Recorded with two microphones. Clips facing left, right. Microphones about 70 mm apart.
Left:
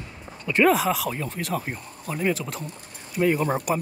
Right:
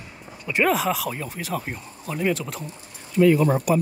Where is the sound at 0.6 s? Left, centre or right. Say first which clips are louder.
Left 2 dB; centre.